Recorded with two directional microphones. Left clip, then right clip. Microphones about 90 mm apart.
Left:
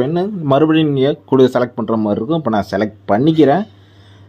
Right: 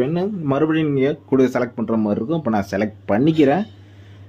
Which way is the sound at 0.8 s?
45° left (ahead or behind).